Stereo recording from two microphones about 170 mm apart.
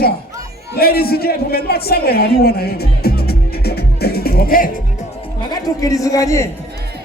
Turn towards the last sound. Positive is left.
turn(degrees=20)  # may be behind; listen again after turning